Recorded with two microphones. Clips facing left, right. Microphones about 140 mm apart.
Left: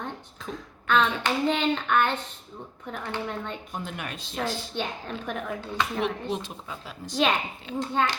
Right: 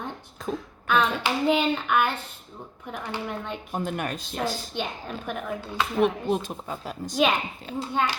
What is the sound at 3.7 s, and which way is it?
Speech, 45° right (ahead or behind).